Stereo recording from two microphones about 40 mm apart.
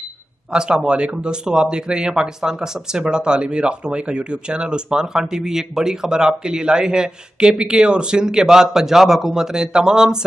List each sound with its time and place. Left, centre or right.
0.5 s speech: right